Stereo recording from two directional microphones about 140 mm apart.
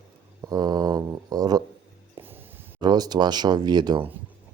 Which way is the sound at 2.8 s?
30° right (ahead or behind).